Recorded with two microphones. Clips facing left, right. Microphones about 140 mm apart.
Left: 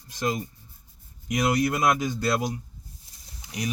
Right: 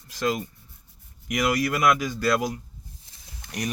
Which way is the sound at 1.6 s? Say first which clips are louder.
Right 1 dB; 25° left (ahead or behind).